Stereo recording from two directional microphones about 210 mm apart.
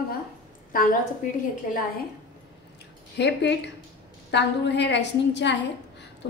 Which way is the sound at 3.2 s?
55° left (ahead or behind).